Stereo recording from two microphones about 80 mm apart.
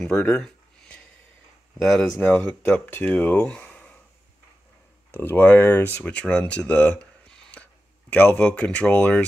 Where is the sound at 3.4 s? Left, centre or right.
Centre.